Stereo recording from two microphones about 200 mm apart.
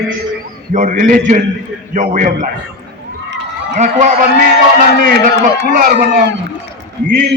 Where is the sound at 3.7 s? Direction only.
35° right (ahead or behind).